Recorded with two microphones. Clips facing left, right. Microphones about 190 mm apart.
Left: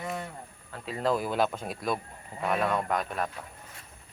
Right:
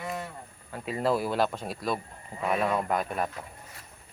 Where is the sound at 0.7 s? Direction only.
5° right (ahead or behind).